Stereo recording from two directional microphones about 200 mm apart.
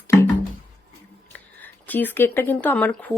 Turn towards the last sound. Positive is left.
turn(degrees=5)  # may be behind; listen again after turning